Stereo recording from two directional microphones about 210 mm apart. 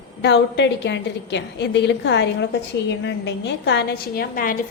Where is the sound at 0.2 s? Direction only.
55° left (ahead or behind).